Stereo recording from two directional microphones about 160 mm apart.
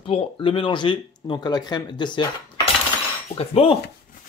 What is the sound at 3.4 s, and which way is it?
Speech, 40° left (ahead or behind).